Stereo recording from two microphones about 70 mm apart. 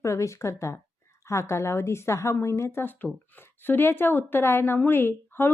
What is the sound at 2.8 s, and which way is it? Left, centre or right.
A woman's voice, left.